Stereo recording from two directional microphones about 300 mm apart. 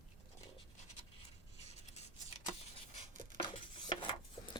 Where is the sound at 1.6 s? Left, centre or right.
Left.